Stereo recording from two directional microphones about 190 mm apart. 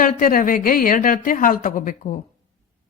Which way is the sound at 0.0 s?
45° left (ahead or behind).